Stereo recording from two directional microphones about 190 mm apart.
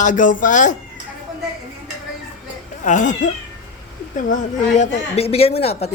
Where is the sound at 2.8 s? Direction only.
40° left (ahead or behind).